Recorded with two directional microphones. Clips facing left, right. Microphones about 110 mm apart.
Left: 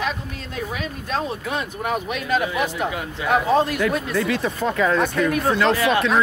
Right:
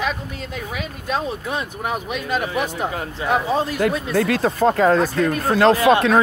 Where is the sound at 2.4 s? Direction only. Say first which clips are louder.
Even; 40° right (ahead or behind).